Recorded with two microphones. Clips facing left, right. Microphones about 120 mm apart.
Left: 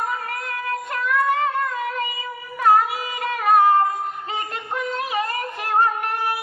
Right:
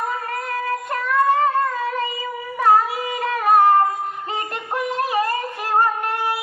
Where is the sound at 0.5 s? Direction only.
35° right (ahead or behind).